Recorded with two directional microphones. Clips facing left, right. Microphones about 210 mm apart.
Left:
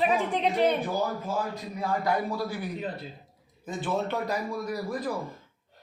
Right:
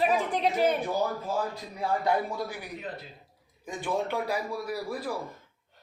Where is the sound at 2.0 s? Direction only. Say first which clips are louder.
Even; 20° right (ahead or behind).